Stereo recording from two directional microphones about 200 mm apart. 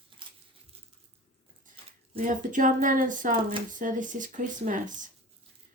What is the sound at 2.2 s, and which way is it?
Speech, 40° right (ahead or behind).